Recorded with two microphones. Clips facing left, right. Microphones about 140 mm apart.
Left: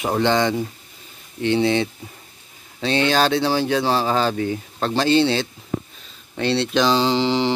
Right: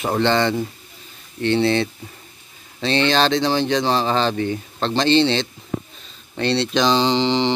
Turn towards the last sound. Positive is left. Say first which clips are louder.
# right 1 dB
turn(degrees=5)  # may be behind; listen again after turning